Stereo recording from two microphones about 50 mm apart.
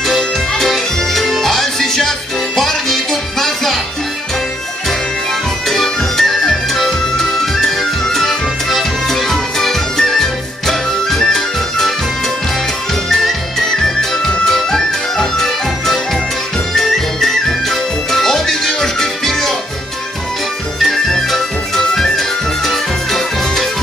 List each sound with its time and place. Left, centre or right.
0.0 s music: centre
5.7 s music: centre
13.1 s music: centre
20.8 s music: centre